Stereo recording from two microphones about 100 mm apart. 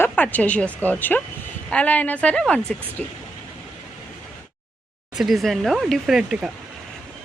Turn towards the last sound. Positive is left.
turn(degrees=-5)  # may be behind; listen again after turning